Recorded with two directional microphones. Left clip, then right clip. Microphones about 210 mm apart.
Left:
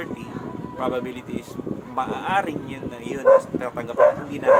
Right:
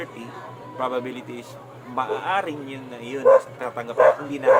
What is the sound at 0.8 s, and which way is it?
Speech, 5° left (ahead or behind).